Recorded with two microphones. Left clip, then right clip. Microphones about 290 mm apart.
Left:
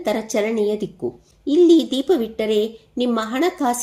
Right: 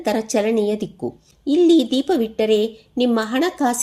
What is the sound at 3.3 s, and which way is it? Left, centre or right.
Speech, right.